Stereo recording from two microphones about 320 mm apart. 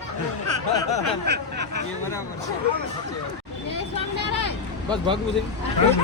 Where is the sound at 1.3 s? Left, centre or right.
Right.